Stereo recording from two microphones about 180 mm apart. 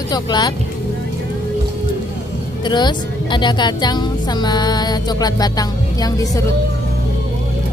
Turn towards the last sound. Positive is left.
turn(degrees=20)  # may be behind; listen again after turning